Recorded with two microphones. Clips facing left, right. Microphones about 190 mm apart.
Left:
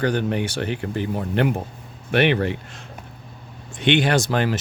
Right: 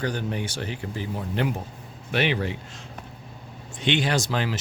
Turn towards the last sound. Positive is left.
turn(degrees=55)  # may be behind; listen again after turning